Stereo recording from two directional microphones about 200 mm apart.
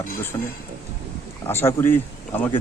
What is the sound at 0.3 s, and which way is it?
Speech, 15° left (ahead or behind).